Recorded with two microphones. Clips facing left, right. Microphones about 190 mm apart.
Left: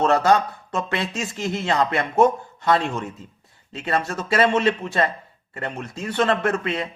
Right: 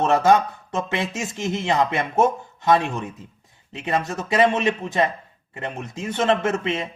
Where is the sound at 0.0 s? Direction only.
20° right (ahead or behind).